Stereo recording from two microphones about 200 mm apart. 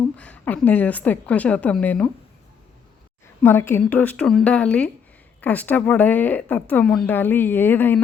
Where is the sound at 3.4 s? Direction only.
10° left (ahead or behind).